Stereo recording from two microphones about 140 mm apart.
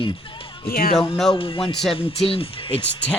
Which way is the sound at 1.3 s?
40° left (ahead or behind).